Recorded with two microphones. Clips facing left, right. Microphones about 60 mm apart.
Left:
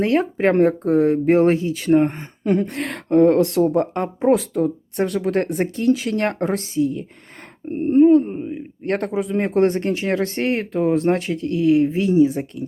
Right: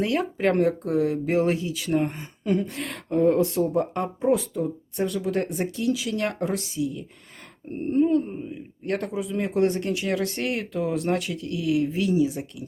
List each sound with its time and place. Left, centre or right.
0.0 s speech: left
3.9 s speech: left